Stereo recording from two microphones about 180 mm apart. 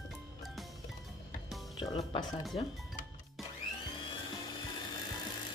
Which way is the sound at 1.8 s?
25° left (ahead or behind).